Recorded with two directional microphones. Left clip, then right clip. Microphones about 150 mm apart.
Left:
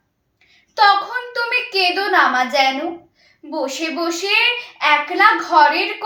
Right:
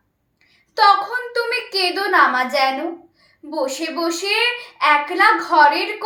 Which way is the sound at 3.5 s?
20° right (ahead or behind).